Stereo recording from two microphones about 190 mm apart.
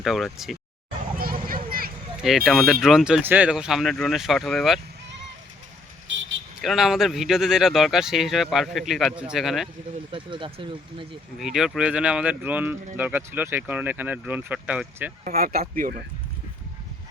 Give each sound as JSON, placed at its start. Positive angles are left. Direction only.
{"t": 0.0, "sound": "speech", "side_deg": 0}
{"t": 1.2, "sound": "a sound", "side_deg": -50}
{"t": 2.1, "sound": "speech", "side_deg": 0}
{"t": 6.1, "sound": "vehicle", "side_deg": -80}
{"t": 6.6, "sound": "speech", "side_deg": 0}
{"t": 10.1, "sound": "speech", "side_deg": -25}
{"t": 11.3, "sound": "speech", "side_deg": 0}
{"t": 15.2, "sound": "speech", "side_deg": -50}